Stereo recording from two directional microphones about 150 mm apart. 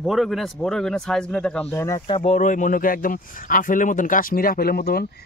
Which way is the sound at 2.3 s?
55° left (ahead or behind).